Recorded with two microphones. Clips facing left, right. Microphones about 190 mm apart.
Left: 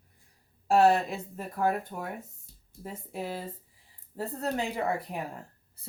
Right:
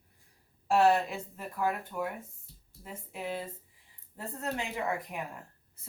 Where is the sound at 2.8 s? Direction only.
35° left (ahead or behind).